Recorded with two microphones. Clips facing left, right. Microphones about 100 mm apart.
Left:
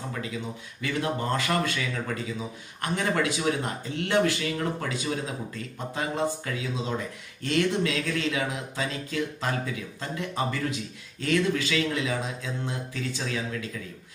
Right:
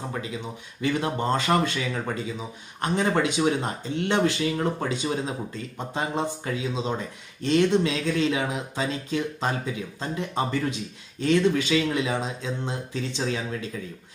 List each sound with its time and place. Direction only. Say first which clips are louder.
0.7 s speech: right 3 dB; 25° right (ahead or behind)